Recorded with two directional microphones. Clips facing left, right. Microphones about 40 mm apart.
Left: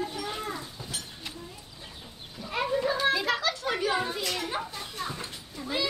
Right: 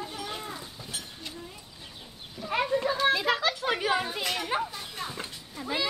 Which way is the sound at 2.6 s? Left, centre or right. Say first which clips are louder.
Even; centre.